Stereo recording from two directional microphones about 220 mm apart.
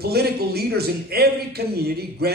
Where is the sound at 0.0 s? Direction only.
45° right (ahead or behind).